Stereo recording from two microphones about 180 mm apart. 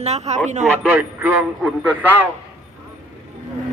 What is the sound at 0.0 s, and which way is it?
Speech, 40° right (ahead or behind).